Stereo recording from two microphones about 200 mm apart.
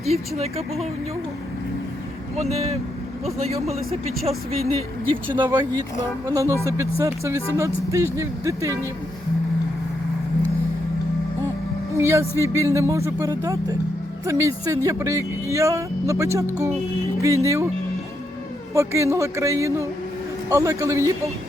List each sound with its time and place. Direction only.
0.0 s speech: 30° right (ahead or behind)
2.4 s speech: 30° right (ahead or behind)
5.4 s speech: 15° right (ahead or behind)
11.9 s speech: 10° right (ahead or behind)
18.7 s speech: 15° right (ahead or behind)